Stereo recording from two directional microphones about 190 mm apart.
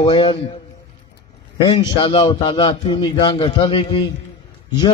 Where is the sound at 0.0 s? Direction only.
25° left (ahead or behind).